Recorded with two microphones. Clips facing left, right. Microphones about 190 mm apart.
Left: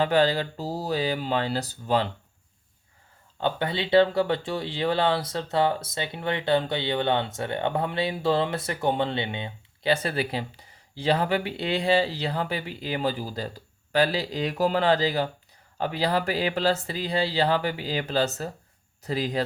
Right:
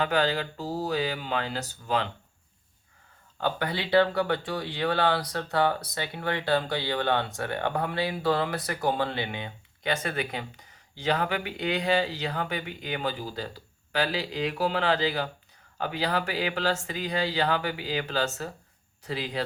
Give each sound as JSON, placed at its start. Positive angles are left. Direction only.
{"t": 0.0, "sound": "speech", "side_deg": 30}
{"t": 3.4, "sound": "speech", "side_deg": 25}